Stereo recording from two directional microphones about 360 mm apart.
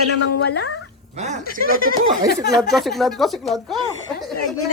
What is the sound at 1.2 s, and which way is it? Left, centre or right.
Speech, centre.